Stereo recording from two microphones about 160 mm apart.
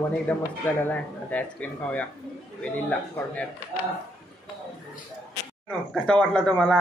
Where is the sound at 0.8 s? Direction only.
10° left (ahead or behind).